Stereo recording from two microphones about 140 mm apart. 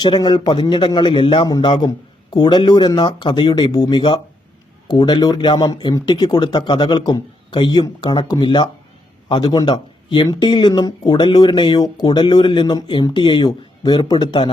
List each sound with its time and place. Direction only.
0.0 s speech: 30° left (ahead or behind)